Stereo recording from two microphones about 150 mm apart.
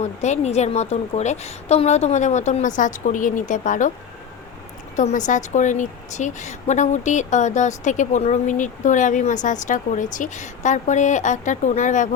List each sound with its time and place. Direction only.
0.0 s a woman's voice: 50° left (ahead or behind)
4.9 s a woman's voice: 55° left (ahead or behind)